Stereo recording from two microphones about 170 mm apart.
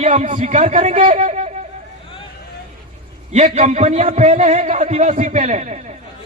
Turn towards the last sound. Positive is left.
turn(degrees=-45)  # may be behind; listen again after turning